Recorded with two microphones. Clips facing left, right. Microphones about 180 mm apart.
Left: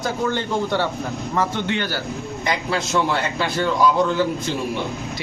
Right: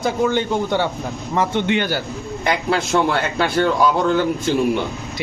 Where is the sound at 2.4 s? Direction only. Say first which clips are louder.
Right 4 dB; 60° right (ahead or behind).